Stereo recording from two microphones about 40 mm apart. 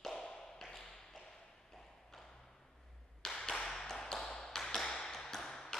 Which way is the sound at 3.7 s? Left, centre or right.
Centre.